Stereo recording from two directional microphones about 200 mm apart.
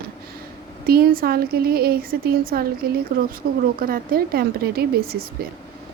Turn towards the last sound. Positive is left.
turn(degrees=-50)  # may be behind; listen again after turning